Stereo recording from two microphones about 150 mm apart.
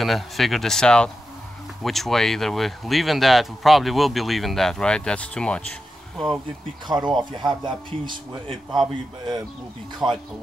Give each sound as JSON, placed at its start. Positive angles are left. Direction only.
{"t": 0.0, "sound": "speech", "side_deg": 0}
{"t": 6.9, "sound": "a man's voice", "side_deg": -25}
{"t": 10.0, "sound": "speech", "side_deg": -5}